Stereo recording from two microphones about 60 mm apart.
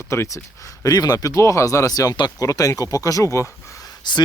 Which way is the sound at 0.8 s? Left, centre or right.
Left.